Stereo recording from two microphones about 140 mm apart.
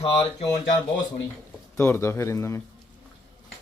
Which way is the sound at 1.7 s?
20° left (ahead or behind).